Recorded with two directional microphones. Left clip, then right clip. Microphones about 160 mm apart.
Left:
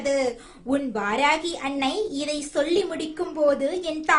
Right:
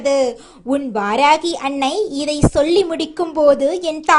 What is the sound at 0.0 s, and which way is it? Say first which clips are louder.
A woman's voice: right 8 dB; 35° right (ahead or behind).